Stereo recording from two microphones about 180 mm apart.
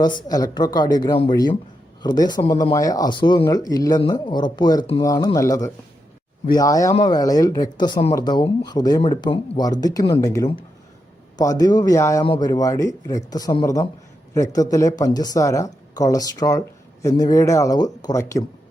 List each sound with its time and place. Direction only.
0.0 s speech: 25° left (ahead or behind)